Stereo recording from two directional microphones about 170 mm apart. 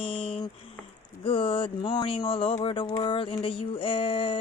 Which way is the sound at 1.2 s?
30° left (ahead or behind).